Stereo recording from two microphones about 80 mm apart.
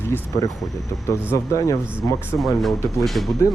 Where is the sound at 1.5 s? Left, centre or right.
Left.